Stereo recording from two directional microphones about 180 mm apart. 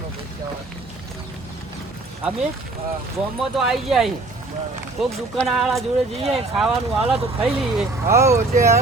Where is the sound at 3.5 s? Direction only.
Centre (ahead or behind).